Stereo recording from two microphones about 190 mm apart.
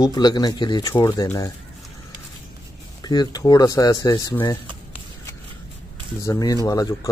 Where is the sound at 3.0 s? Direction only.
20° left (ahead or behind).